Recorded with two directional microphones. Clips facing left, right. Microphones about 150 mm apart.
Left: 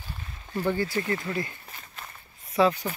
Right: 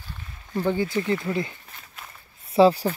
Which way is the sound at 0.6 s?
15° right (ahead or behind).